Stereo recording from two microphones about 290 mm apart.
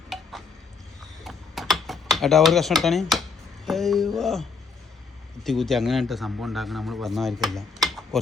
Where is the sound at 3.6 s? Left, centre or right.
Centre.